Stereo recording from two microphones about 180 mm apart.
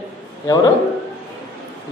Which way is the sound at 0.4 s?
20° left (ahead or behind).